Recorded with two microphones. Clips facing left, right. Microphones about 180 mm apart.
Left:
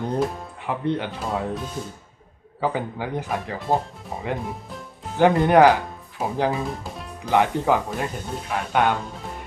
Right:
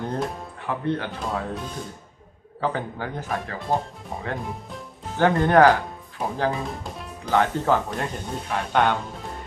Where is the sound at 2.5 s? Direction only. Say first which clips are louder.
Left 2 dB; 10° left (ahead or behind).